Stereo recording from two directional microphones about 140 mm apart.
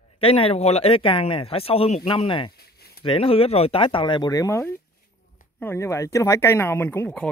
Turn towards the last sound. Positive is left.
turn(degrees=10)  # may be behind; listen again after turning